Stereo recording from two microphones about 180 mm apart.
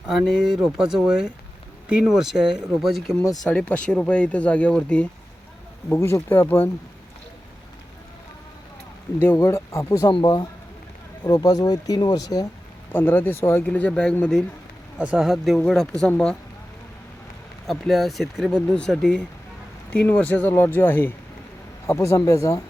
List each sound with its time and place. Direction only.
0.1 s speech: centre (ahead or behind)
9.1 s speech: 10° left (ahead or behind)
14.9 s speech: 5° right (ahead or behind)
17.7 s speech: centre (ahead or behind); by 22.6 s 20° left (ahead or behind)